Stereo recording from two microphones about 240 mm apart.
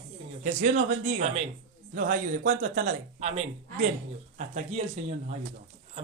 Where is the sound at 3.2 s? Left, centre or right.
Right.